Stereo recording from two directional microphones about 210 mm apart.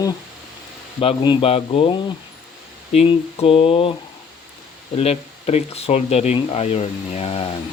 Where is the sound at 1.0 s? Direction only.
30° left (ahead or behind).